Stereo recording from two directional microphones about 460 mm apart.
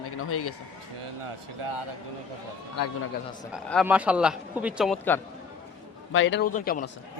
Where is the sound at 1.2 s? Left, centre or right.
Right.